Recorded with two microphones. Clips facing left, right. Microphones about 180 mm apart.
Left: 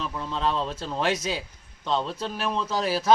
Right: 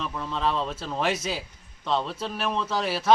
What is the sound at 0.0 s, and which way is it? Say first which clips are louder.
A man's voice: even; centre (ahead or behind).